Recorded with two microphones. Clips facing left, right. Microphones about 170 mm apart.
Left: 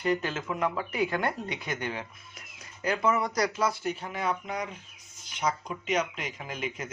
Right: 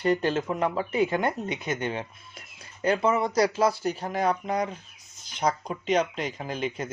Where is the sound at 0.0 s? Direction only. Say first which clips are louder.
Right 5 dB; 35° right (ahead or behind).